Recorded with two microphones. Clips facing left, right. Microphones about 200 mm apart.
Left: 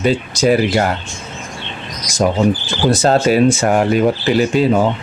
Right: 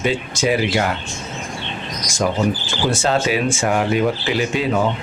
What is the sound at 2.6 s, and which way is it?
Speech, 40° left (ahead or behind).